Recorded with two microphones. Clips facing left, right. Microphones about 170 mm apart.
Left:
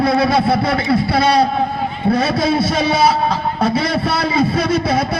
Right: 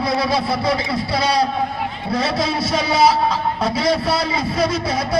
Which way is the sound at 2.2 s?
25° right (ahead or behind).